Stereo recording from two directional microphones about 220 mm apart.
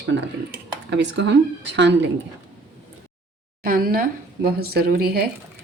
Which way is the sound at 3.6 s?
40° right (ahead or behind).